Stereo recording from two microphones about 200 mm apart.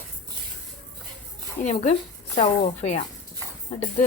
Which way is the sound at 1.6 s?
40° left (ahead or behind).